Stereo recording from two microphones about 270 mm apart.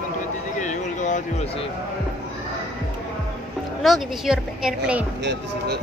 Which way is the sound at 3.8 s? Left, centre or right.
Centre.